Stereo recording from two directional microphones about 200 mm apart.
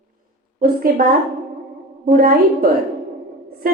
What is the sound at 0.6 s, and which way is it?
Speech, 45° right (ahead or behind).